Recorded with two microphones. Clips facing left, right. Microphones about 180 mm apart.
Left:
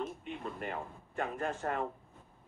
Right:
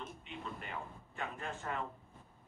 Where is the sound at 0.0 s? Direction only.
50° left (ahead or behind).